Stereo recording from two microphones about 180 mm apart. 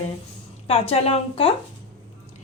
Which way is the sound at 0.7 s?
35° left (ahead or behind).